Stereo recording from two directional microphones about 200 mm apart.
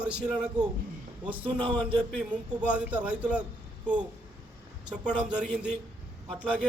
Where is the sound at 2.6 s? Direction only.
5° right (ahead or behind).